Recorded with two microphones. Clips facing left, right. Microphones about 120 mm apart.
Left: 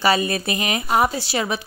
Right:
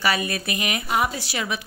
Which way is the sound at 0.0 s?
30° left (ahead or behind).